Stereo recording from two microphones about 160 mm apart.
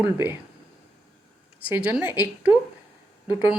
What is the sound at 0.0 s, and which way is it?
Speech, 10° right (ahead or behind).